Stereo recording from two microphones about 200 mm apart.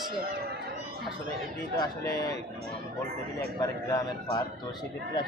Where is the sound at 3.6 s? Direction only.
20° left (ahead or behind).